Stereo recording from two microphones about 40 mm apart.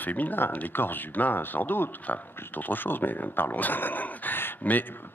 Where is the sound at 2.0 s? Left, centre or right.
Left.